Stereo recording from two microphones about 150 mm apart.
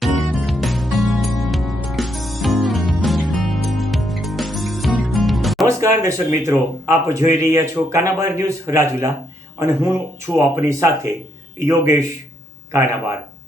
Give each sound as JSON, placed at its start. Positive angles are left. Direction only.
{"t": 0.0, "sound": "music", "side_deg": 0}
{"t": 5.6, "sound": "speech", "side_deg": -20}
{"t": 10.3, "sound": "speech", "side_deg": -20}